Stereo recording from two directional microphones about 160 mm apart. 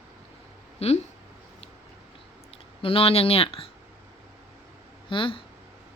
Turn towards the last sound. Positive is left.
turn(degrees=35)  # may be behind; listen again after turning